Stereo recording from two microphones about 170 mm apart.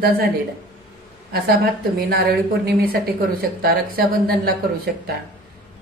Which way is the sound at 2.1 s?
70° right (ahead or behind).